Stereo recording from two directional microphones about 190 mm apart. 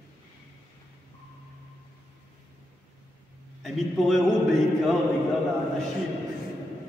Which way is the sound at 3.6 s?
Centre (ahead or behind).